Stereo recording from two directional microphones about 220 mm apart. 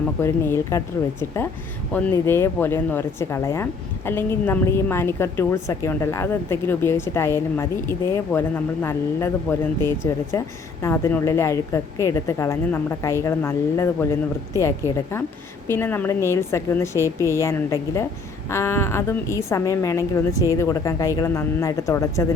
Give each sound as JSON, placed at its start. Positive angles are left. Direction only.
{"t": 0.2, "sound": "speech", "side_deg": 10}
{"t": 1.9, "sound": "speech", "side_deg": 10}